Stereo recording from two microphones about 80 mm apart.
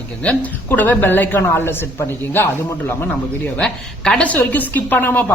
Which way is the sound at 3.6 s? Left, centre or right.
Centre.